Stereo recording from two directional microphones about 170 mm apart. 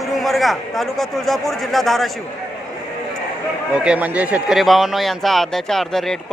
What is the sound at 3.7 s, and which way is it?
A man's voice, 5° right (ahead or behind).